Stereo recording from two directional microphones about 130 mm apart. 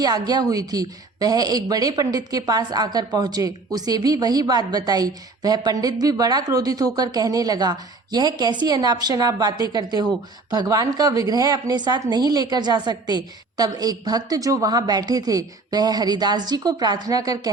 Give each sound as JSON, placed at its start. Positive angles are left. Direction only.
{"t": 0.0, "sound": "a woman's voice", "side_deg": -30}